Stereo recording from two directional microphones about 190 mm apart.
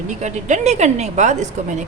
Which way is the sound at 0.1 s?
40° right (ahead or behind).